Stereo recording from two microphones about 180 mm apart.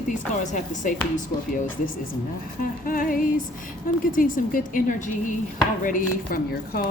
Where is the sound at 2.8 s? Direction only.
50° left (ahead or behind).